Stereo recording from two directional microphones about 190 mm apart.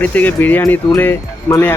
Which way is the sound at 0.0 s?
10° left (ahead or behind).